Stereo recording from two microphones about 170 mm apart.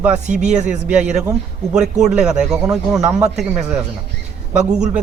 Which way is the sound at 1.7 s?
5° right (ahead or behind).